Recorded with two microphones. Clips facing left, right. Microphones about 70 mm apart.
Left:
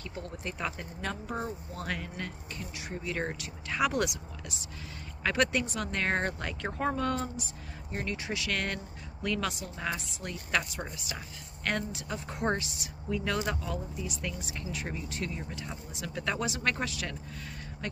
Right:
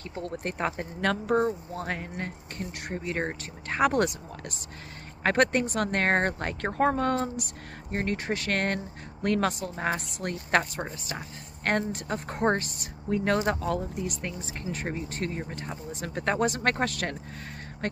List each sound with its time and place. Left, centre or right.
0.1 s speech: right
1.0 s speech: right
1.8 s speech: right
2.5 s speech: right
3.1 s speech: right
10.6 s speech: right
14.2 s speech: right